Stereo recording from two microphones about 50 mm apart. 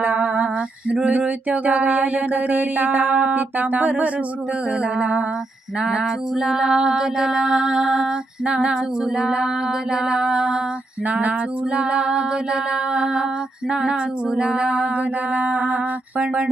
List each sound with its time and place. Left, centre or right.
0.0 s female singing: right
3.6 s music: right
4.7 s female singing: right
5.8 s music: centre
11.0 s female singing: right